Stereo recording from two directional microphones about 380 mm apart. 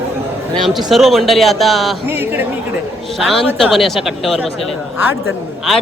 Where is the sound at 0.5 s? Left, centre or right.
Centre.